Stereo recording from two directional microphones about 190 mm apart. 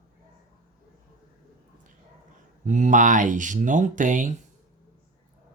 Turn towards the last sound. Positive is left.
turn(degrees=-40)  # may be behind; listen again after turning